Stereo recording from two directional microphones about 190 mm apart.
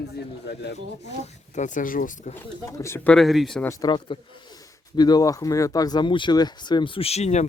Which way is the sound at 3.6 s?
20° left (ahead or behind).